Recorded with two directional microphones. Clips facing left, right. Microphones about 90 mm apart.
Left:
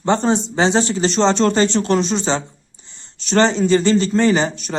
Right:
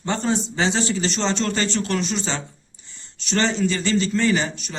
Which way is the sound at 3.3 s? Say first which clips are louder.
Left 7 dB; 35° left (ahead or behind).